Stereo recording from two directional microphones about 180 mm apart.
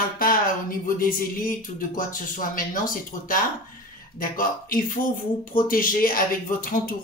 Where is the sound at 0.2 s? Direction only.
50° left (ahead or behind).